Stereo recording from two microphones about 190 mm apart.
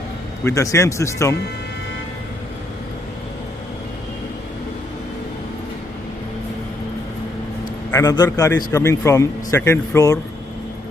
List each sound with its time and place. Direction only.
0.5 s speech: 15° left (ahead or behind)
7.9 s a man's voice: 20° left (ahead or behind)